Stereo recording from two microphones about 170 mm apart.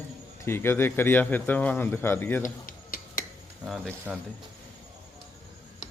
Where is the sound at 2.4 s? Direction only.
55° left (ahead or behind).